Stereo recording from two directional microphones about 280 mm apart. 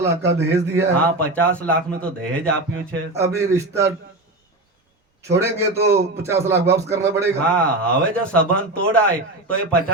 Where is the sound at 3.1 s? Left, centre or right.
Centre.